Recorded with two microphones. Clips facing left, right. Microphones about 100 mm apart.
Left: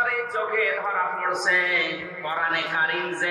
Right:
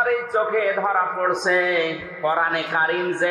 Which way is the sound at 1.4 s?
40° right (ahead or behind).